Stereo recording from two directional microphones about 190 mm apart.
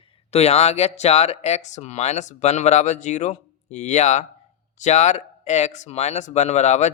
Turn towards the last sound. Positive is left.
turn(degrees=35)  # may be behind; listen again after turning